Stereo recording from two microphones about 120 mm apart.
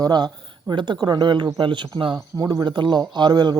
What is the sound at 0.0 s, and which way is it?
Speech, 35° right (ahead or behind).